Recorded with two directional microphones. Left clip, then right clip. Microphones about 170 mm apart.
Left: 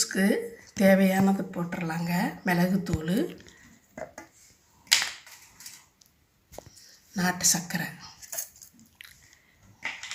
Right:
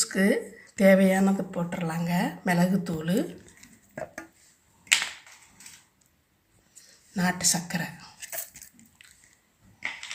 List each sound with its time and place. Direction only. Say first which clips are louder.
0.0 s speech: right 1 dB; 25° right (ahead or behind)
7.1 s speech: left 1 dB; 25° right (ahead or behind)
9.0 s squish: left 6 dB; 5° right (ahead or behind)